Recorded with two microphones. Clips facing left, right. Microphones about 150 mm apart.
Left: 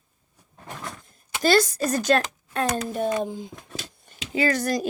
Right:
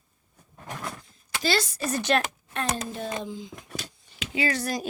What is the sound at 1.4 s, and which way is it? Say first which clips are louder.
A woman's voice: left 7 dB; 50° left (ahead or behind).